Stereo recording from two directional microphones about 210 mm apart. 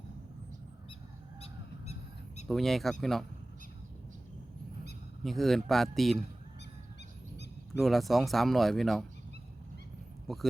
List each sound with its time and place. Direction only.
1.4 s goose: 30° left (ahead or behind)
2.5 s speech: centre (ahead or behind)
5.2 s speech: centre (ahead or behind)
7.8 s speech: centre (ahead or behind)
10.3 s speech: centre (ahead or behind)